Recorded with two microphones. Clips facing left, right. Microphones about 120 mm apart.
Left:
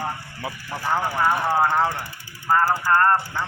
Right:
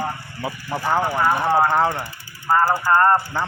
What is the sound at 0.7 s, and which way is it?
Speech, 25° right (ahead or behind).